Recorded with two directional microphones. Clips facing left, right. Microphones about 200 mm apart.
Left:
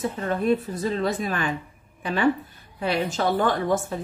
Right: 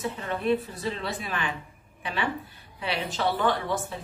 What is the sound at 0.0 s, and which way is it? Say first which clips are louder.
A woman's voice: left 4 dB; 45° left (ahead or behind).